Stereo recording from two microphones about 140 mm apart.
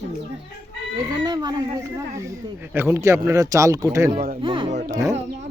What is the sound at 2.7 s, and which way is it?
Speech, 15° right (ahead or behind).